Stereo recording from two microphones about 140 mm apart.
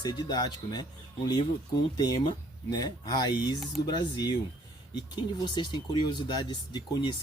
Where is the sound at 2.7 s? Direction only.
30° left (ahead or behind).